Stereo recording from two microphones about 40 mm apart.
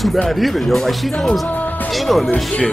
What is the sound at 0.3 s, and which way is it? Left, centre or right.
Speech, centre.